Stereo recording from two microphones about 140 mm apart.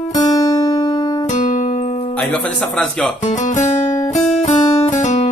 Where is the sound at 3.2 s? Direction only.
60° left (ahead or behind).